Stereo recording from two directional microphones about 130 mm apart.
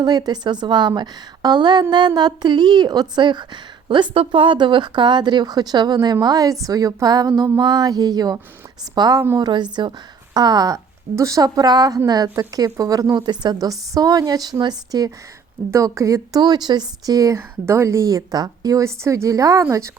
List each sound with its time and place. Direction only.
0.0 s a woman's voice: 30° right (ahead or behind)